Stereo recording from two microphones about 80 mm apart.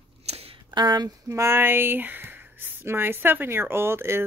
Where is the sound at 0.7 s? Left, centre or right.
Right.